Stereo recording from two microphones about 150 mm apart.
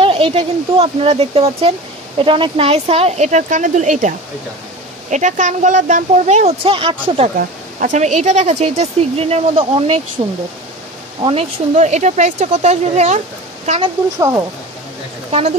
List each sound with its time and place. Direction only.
0.0 s speech: 40° right (ahead or behind); by 4.1 s 55° right (ahead or behind)
5.1 s speech: 55° right (ahead or behind); by 7.2 s 35° right (ahead or behind)
7.3 s speech: 60° right (ahead or behind); by 10.0 s 40° right (ahead or behind)
11.2 s speech: 45° right (ahead or behind)